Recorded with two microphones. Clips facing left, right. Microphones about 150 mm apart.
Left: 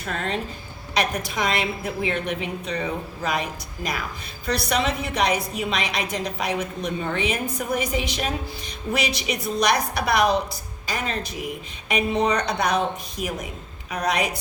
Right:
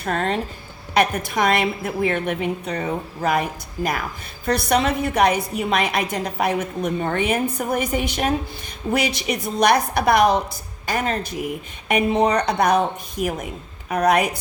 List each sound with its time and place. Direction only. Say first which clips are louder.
0.0 s a woman's voice: right 5 dB; 50° right (ahead or behind)
13.9 s a woman's voice: right 6 dB; 55° right (ahead or behind)